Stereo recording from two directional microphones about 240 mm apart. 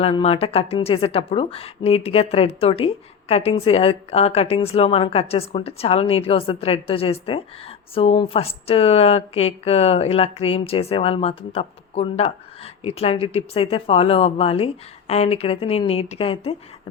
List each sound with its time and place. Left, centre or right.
0.0 s speech: left